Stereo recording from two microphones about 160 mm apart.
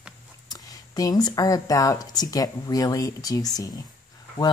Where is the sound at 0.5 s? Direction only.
20° left (ahead or behind).